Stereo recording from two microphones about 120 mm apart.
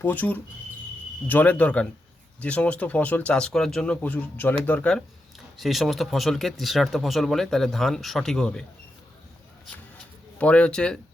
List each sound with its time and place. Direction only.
0.0 s speech: 15° left (ahead or behind)
10.3 s speech: 10° left (ahead or behind)